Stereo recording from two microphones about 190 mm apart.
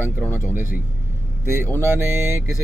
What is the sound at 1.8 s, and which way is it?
Speech, 15° right (ahead or behind).